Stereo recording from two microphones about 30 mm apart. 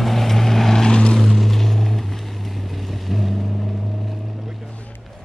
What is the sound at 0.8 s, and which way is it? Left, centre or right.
Vehicle, left.